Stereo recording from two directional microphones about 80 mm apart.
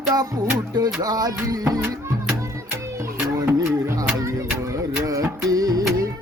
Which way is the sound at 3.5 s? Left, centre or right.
Right.